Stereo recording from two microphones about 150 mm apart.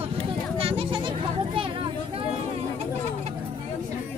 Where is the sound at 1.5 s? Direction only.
35° right (ahead or behind).